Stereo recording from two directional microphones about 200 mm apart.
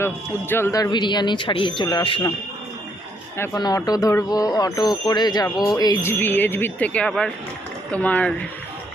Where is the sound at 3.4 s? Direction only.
15° left (ahead or behind).